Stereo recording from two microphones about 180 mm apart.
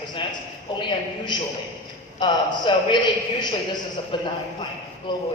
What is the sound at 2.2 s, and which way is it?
A man's voice, 25° left (ahead or behind).